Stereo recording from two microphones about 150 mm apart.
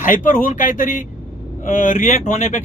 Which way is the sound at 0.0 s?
60° left (ahead or behind).